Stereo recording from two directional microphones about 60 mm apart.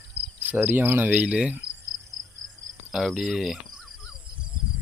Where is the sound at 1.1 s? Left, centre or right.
Right.